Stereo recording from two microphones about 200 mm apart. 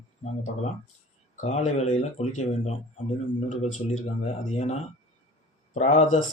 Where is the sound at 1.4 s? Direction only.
35° left (ahead or behind).